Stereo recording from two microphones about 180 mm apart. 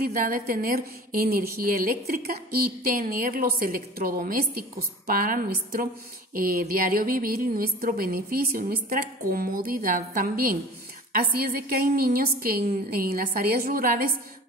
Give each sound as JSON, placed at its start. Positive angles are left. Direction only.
{"t": 0.0, "sound": "a woman's voice", "side_deg": -50}